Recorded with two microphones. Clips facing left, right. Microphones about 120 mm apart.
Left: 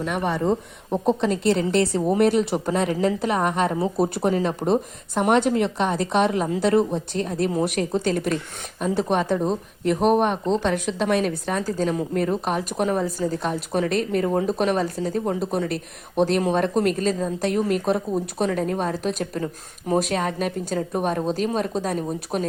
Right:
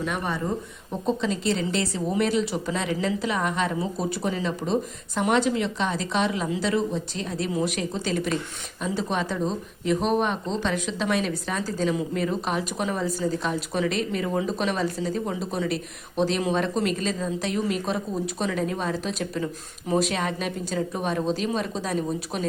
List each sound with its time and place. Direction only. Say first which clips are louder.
1.0 s a woman's voice: left 4 dB; 60° left (ahead or behind)